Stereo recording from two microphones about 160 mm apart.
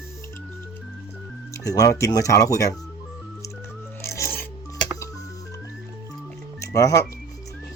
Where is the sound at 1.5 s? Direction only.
20° left (ahead or behind).